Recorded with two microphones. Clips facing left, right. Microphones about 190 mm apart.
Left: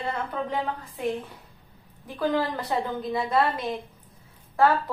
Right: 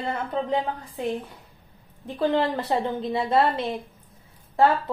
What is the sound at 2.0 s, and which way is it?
A woman's voice, 25° right (ahead or behind).